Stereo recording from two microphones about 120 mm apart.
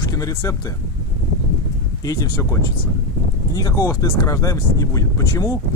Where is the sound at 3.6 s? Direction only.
30° left (ahead or behind).